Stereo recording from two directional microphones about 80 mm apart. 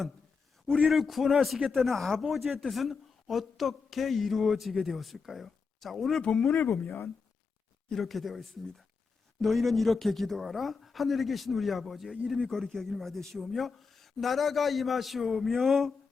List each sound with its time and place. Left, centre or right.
0.8 s speech: centre
6.8 s speech: left
7.9 s speech: centre